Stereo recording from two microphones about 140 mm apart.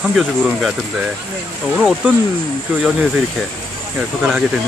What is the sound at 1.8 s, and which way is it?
Speech, centre (ahead or behind).